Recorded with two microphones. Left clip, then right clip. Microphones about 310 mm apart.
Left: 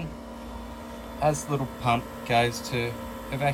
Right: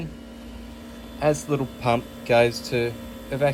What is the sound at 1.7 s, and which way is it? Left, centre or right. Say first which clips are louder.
Speech: even; centre.